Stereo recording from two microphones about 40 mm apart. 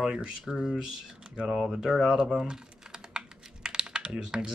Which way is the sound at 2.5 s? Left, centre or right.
Centre.